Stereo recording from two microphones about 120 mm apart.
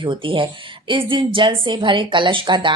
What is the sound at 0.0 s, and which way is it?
A woman's voice, 45° right (ahead or behind).